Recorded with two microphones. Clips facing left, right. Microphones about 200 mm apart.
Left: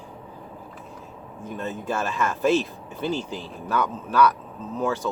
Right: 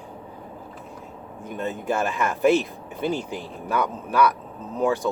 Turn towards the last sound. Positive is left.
turn(degrees=-15)  # may be behind; listen again after turning